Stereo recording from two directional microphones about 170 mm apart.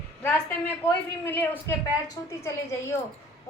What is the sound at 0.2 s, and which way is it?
A woman's voice, 10° left (ahead or behind).